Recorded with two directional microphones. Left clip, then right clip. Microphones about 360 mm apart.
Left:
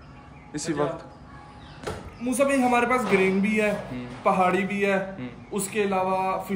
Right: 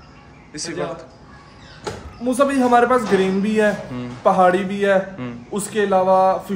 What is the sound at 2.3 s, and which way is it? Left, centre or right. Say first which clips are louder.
A man's voice: right 6 dB; right.